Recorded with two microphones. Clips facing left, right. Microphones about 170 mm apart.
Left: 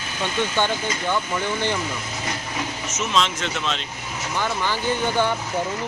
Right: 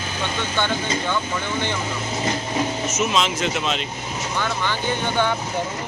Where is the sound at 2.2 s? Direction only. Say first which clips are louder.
Right 7 dB; 30° right (ahead or behind).